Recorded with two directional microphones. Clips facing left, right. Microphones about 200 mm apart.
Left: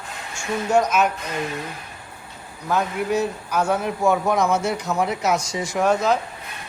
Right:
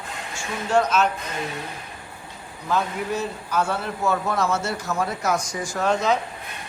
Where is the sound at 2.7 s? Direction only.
10° left (ahead or behind).